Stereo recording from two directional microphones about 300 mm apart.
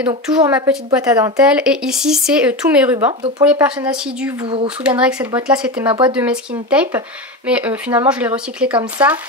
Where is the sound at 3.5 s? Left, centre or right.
Centre.